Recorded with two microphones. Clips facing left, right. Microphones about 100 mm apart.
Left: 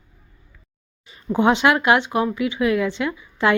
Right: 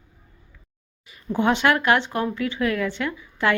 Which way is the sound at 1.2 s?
20° left (ahead or behind).